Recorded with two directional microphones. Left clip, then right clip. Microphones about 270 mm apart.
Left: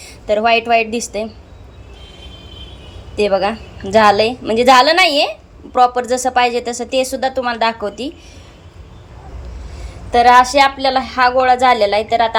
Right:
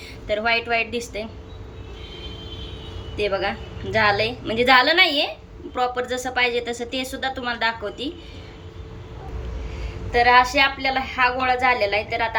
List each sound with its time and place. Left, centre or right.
0.0 s a woman's voice: centre
3.2 s a woman's voice: left
10.1 s a woman's voice: left